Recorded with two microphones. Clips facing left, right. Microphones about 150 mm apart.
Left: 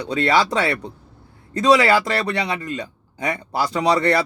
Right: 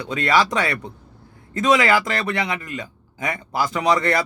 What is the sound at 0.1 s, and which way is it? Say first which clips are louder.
Speech: left 1 dB; 25° left (ahead or behind).